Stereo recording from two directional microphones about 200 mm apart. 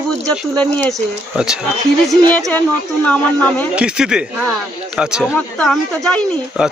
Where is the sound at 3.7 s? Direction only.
5° right (ahead or behind).